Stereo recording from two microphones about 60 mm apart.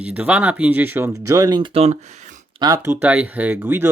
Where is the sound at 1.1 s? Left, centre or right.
Right.